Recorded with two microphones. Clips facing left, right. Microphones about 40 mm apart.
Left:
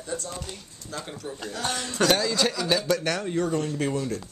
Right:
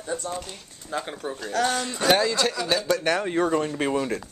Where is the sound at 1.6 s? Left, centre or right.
Right.